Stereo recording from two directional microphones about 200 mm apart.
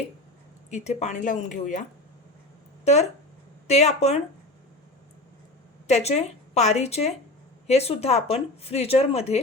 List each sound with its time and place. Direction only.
0.7 s speech: 35° left (ahead or behind)
2.8 s speech: 35° left (ahead or behind)
5.9 s speech: 35° left (ahead or behind)